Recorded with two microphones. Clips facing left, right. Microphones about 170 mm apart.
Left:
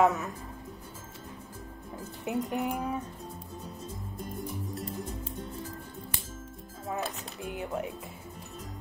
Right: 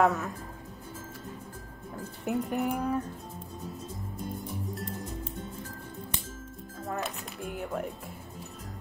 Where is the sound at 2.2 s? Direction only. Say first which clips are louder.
Right 1 dB; centre (ahead or behind).